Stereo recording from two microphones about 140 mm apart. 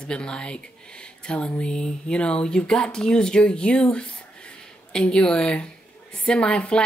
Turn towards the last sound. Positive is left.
turn(degrees=5)  # may be behind; listen again after turning